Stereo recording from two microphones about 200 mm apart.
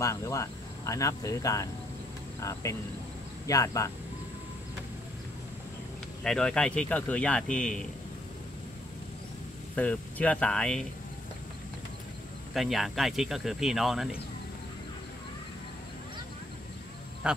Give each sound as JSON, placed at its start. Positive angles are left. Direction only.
{"t": 0.0, "sound": "speech", "side_deg": 15}
{"t": 3.4, "sound": "speech", "side_deg": 15}
{"t": 6.2, "sound": "speech", "side_deg": 5}
{"t": 9.8, "sound": "speech", "side_deg": 5}
{"t": 12.5, "sound": "speech", "side_deg": 0}